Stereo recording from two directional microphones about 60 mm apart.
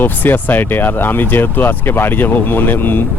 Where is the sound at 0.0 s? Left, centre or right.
Left.